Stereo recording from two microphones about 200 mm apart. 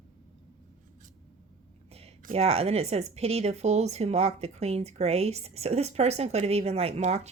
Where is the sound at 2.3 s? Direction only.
30° right (ahead or behind).